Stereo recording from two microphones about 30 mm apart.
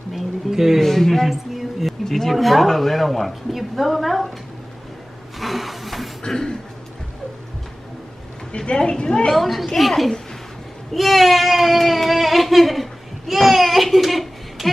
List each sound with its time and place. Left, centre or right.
0.1 s speech: centre
0.7 s speech: centre
1.3 s music: centre
2.0 s speech: centre
2.3 s a woman's voice: centre
5.4 s a sound: centre
6.2 s speech: centre
8.7 s a woman's voice: left
9.3 s a woman's voice: centre
11.0 s a sound: centre